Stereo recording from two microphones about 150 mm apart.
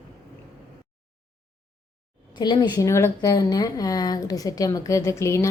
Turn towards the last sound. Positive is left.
turn(degrees=20)  # may be behind; listen again after turning